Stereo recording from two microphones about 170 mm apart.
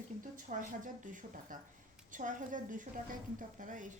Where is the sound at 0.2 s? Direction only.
50° right (ahead or behind).